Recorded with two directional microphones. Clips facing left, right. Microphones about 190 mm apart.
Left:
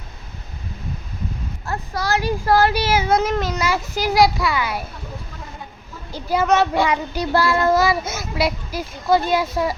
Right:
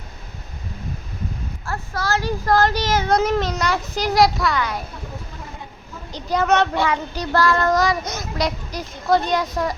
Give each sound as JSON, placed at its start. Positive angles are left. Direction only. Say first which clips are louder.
{"t": 1.6, "sound": "child singing", "louder": "left 1 dB", "side_deg": 15}
{"t": 6.1, "sound": "child singing", "louder": "left 1 dB", "side_deg": 10}